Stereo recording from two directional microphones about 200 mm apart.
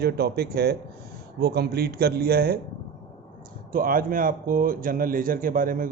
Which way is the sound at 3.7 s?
45° right (ahead or behind).